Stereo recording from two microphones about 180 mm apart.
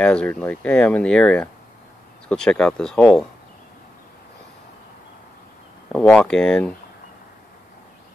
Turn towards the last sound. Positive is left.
turn(degrees=5)  # may be behind; listen again after turning